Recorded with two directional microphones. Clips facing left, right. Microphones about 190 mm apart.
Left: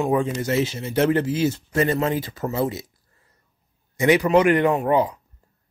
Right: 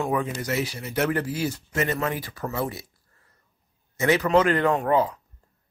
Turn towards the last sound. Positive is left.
turn(degrees=15)  # may be behind; listen again after turning